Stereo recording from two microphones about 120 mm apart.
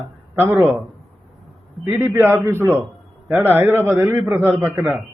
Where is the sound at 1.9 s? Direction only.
15° right (ahead or behind).